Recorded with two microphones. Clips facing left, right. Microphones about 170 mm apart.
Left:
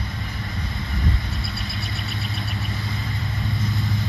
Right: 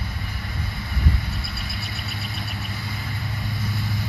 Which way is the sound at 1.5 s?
20° left (ahead or behind).